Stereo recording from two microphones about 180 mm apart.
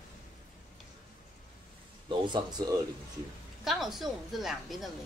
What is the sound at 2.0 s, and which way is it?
Speech, 25° right (ahead or behind).